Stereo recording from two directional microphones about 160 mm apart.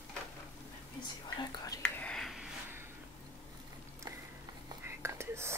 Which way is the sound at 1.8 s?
5° left (ahead or behind).